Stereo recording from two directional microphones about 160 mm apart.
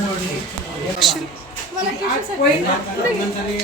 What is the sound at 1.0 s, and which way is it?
Speech, centre (ahead or behind).